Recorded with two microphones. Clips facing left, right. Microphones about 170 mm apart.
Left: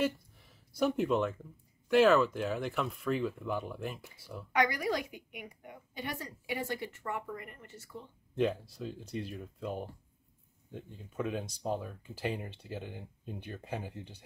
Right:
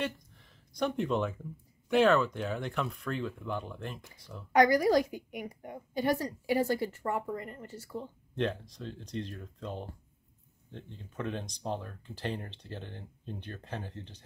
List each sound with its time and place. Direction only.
0.0 s a sound: 5° left (ahead or behind)
1.9 s speech: centre (ahead or behind)
4.5 s a woman's voice: 40° right (ahead or behind)
8.4 s speech: 5° left (ahead or behind)